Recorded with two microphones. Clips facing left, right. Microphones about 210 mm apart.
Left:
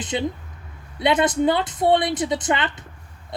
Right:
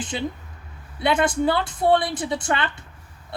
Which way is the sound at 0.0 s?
20° left (ahead or behind).